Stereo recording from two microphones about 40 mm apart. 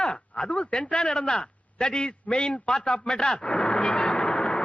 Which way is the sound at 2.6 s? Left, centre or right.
Left.